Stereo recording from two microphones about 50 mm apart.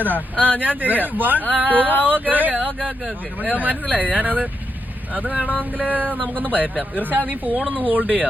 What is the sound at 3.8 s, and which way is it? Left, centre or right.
Speech, right.